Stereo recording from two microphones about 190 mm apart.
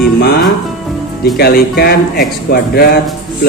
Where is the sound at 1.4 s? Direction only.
55° left (ahead or behind).